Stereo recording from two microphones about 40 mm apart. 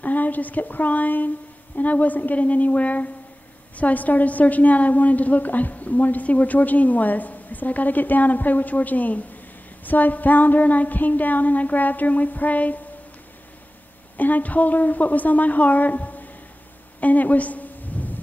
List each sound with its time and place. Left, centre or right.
0.0 s a woman's voice: left
14.1 s a woman's voice: left
17.0 s a sound: left